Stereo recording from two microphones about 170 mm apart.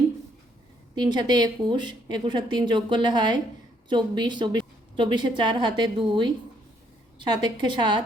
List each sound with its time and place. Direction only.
0.9 s a woman's voice: 25° right (ahead or behind)